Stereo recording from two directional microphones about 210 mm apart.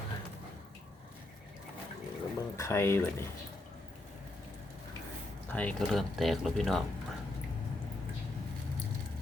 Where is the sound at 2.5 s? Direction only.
15° left (ahead or behind).